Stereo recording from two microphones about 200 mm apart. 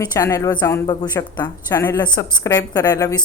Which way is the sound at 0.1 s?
15° left (ahead or behind).